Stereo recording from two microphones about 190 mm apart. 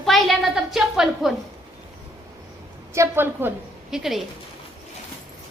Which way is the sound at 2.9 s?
15° right (ahead or behind).